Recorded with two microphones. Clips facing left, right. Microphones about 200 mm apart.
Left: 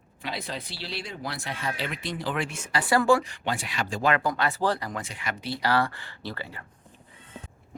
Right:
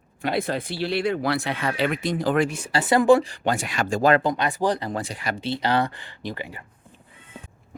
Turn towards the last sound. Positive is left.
turn(degrees=-15)  # may be behind; listen again after turning